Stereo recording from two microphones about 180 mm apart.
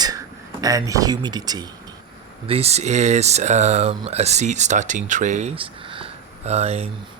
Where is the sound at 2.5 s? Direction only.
35° right (ahead or behind).